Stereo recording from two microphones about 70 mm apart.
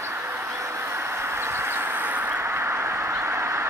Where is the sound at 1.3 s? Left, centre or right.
Right.